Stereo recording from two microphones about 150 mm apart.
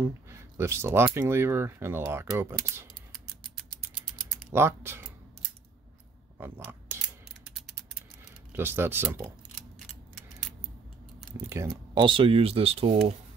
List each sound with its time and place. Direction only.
0.0 s speech: 15° right (ahead or behind)
4.5 s speech: 15° right (ahead or behind)
6.3 s speech: 15° right (ahead or behind)
8.5 s speech: 15° right (ahead or behind)
11.4 s speech: 15° right (ahead or behind)
11.9 s speech: 35° right (ahead or behind)